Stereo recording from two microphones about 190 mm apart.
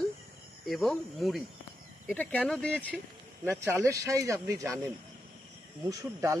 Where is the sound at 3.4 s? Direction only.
15° right (ahead or behind).